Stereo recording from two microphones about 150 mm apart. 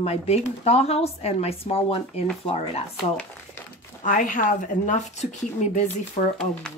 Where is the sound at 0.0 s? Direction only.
45° left (ahead or behind).